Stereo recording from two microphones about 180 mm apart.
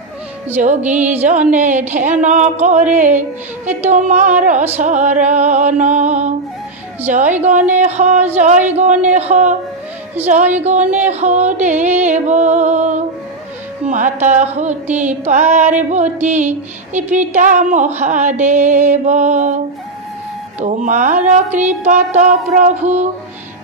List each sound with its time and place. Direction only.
0.8 s music: 10° right (ahead or behind)
1.2 s a woman's voice: 40° right (ahead or behind)
10.6 s a woman's voice: 40° right (ahead or behind)
20.6 s a woman's voice: 45° right (ahead or behind)
22.3 s music: centre (ahead or behind)